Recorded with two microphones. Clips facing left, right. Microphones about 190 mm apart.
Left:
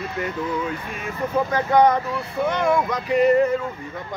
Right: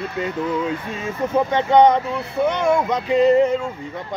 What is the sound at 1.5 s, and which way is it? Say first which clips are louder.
Speech: right 3 dB; 20° right (ahead or behind).